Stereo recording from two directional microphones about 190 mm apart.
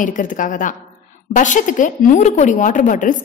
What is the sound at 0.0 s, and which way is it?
A woman's voice, 45° left (ahead or behind).